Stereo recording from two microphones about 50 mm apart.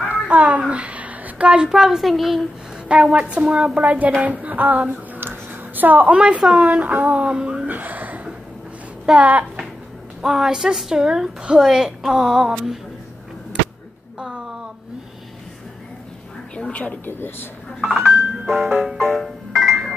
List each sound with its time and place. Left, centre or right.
0.1 s a child's voice: right; by 2.4 s centre
2.9 s a woman's voice: centre
3.2 s speech: right
4.2 s a sound: right
6.1 s speech: right
7.6 s a sound: right
9.2 s speech: right
10.2 s a woman's voice: centre
16.5 s a woman's voice: left
17.0 s speech: left
17.8 s speech: centre
18.8 s music: centre